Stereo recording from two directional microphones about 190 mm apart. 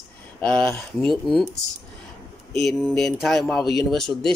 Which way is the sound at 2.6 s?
Centre (ahead or behind).